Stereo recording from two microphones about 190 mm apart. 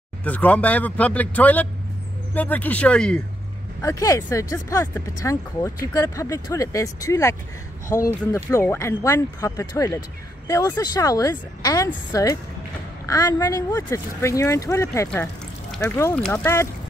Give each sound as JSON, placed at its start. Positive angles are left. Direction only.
{"t": 0.2, "sound": "speech", "side_deg": 10}
{"t": 3.8, "sound": "speech", "side_deg": 15}